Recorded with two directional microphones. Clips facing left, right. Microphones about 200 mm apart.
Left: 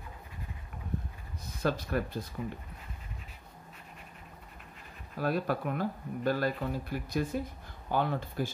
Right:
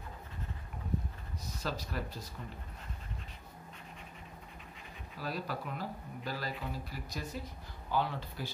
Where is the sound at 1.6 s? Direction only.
55° left (ahead or behind).